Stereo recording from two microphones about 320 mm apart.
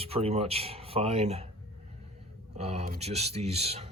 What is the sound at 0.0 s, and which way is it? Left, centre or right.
Speech, centre.